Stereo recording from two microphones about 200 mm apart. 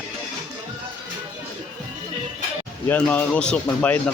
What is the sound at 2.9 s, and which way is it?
Speech, 5° left (ahead or behind).